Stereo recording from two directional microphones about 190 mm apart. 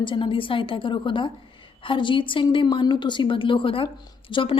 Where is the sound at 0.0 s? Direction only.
25° left (ahead or behind).